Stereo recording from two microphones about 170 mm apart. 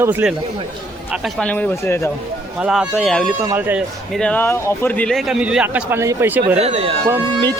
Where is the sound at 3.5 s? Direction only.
10° right (ahead or behind).